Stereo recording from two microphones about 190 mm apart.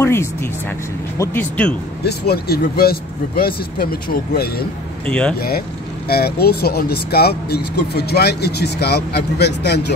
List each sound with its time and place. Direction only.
0.0 s speech: 15° left (ahead or behind)
2.0 s speech: 55° left (ahead or behind)
5.0 s a man's voice: 5° left (ahead or behind)
6.0 s speech: 55° left (ahead or behind)